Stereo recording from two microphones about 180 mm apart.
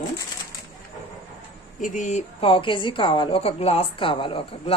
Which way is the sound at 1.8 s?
45° left (ahead or behind).